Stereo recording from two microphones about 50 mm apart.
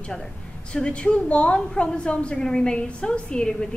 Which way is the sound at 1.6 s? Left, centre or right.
Centre.